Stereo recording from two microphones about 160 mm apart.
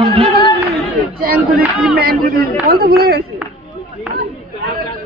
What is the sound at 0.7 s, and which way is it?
Chatter, 65° right (ahead or behind).